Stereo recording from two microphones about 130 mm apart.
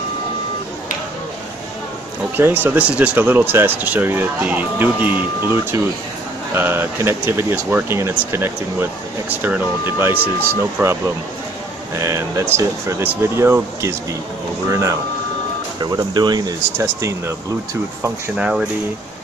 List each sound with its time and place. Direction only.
2.3 s speech: 15° right (ahead or behind)
6.5 s speech: 15° right (ahead or behind)
12.0 s speech: 20° right (ahead or behind)
18.4 s speech: 5° right (ahead or behind)